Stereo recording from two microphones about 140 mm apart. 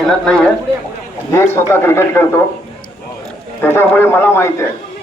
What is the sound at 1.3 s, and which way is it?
Speech, 20° left (ahead or behind).